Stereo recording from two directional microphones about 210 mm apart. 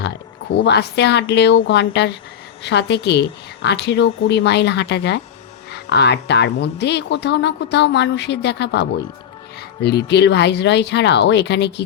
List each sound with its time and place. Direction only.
0.5 s a woman's voice: 55° left (ahead or behind)